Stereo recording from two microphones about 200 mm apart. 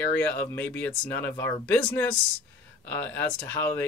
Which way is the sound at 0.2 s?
10° left (ahead or behind).